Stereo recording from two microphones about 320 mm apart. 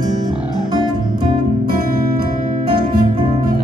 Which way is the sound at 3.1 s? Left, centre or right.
Centre.